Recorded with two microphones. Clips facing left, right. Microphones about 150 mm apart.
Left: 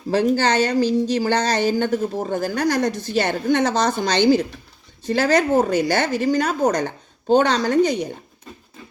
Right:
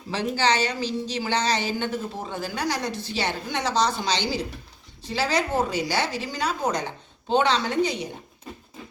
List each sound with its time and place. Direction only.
0.1 s speech: 45° left (ahead or behind)